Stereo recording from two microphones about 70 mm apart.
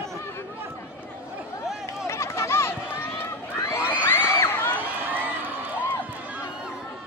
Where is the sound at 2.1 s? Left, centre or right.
Left.